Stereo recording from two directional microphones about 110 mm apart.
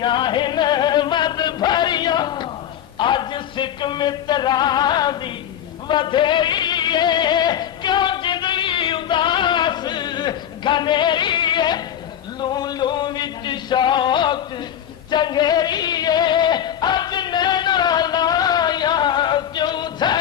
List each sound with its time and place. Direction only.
0.0 s music: 45° left (ahead or behind)